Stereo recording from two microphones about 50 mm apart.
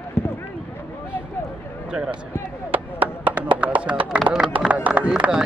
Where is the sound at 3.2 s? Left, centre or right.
Right.